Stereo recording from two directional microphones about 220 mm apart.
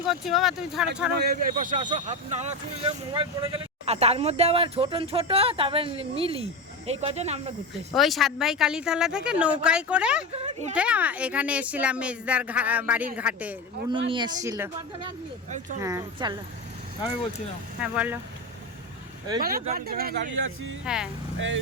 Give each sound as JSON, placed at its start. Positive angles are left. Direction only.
{"t": 0.0, "sound": "speech", "side_deg": 0}
{"t": 1.2, "sound": "speech", "side_deg": -40}
{"t": 7.9, "sound": "speech", "side_deg": 0}
{"t": 10.3, "sound": "speech", "side_deg": -30}
{"t": 10.8, "sound": "speech", "side_deg": -5}
{"t": 14.1, "sound": "speech", "side_deg": -20}
{"t": 15.8, "sound": "speech", "side_deg": -15}
{"t": 17.7, "sound": "speech", "side_deg": -5}
{"t": 19.4, "sound": "speech", "side_deg": -40}
{"t": 20.3, "sound": "speech", "side_deg": -60}
{"t": 20.8, "sound": "speech", "side_deg": -5}